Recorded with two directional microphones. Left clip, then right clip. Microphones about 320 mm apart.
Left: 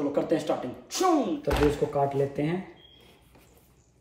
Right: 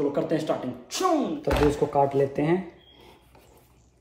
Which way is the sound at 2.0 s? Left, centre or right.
Centre.